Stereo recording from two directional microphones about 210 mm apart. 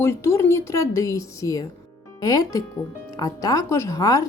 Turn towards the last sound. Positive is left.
turn(degrees=15)  # may be behind; listen again after turning